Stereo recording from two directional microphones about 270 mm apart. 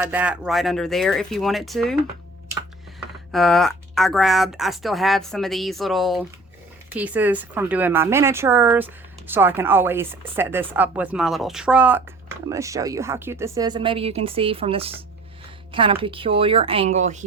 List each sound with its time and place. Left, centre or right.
0.0 s speech: centre
3.3 s a woman's voice: centre; by 17.2 s right